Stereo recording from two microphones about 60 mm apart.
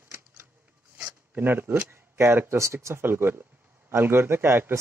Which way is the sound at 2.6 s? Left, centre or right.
Right.